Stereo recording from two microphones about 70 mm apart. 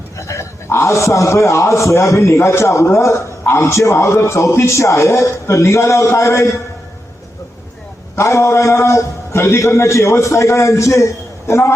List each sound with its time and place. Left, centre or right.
0.2 s a man's voice: left
8.1 s a man's voice: left